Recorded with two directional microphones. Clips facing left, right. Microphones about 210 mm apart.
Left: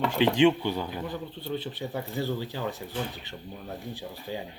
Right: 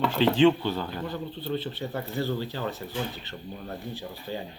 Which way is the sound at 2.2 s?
15° left (ahead or behind).